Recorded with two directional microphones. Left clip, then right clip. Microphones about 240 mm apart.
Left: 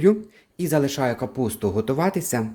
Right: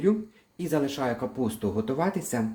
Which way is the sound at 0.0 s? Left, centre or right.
Left.